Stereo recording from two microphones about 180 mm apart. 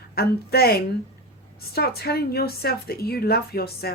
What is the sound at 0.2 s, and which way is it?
A woman's voice, 60° left (ahead or behind).